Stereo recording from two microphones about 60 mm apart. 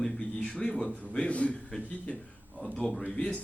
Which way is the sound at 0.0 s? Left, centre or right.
Centre.